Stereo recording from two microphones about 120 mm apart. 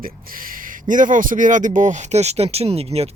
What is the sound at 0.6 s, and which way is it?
Speech, 90° right.